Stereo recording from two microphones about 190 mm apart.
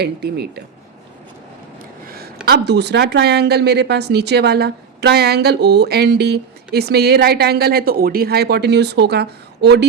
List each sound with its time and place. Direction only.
0.0 s speech: 60° right (ahead or behind)
2.0 s speech: 55° right (ahead or behind)